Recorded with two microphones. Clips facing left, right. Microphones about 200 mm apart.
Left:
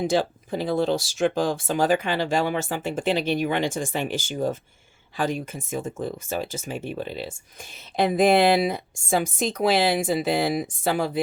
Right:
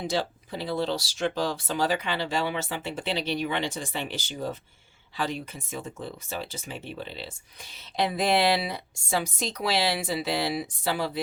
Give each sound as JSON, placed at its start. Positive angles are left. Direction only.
{"t": 0.0, "sound": "speech", "side_deg": 50}